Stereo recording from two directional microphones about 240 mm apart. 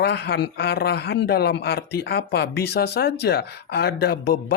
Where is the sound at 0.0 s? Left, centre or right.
Left.